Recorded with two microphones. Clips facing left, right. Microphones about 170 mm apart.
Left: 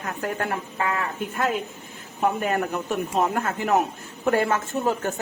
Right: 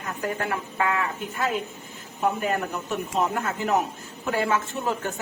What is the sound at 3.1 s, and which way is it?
A woman's voice, 55° left (ahead or behind).